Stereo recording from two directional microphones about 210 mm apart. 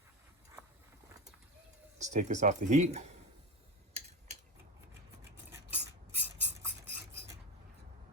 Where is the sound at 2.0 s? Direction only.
35° right (ahead or behind).